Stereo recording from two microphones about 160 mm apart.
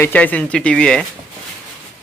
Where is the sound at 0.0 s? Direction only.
10° left (ahead or behind).